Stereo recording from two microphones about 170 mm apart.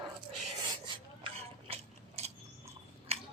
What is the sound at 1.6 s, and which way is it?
Biting, 35° right (ahead or behind).